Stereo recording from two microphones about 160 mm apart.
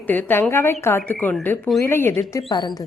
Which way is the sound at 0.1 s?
10° left (ahead or behind).